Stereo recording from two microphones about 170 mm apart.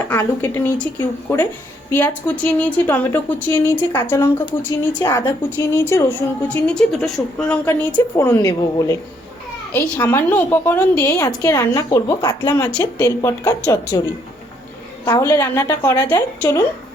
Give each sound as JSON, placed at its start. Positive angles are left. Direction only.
{"t": 0.1, "sound": "a woman's voice", "side_deg": 10}
{"t": 15.0, "sound": "a woman's voice", "side_deg": 20}